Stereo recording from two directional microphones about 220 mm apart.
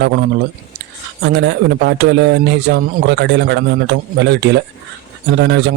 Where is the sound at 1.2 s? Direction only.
50° right (ahead or behind).